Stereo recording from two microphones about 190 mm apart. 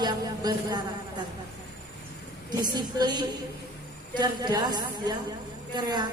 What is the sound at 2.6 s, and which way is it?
A woman's voice, 20° right (ahead or behind).